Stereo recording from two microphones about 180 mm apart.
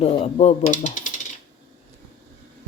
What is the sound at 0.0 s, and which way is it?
Coin, 35° left (ahead or behind).